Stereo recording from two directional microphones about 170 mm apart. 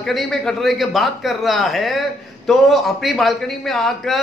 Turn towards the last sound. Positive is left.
turn(degrees=0)  # may be behind; listen again after turning